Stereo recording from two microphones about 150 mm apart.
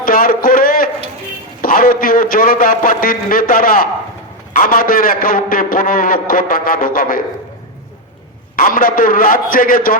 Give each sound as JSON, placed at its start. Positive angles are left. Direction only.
{"t": 0.0, "sound": "a sound", "side_deg": 70}
{"t": 1.6, "sound": "a man's voice", "side_deg": 70}
{"t": 8.5, "sound": "a man's voice", "side_deg": 70}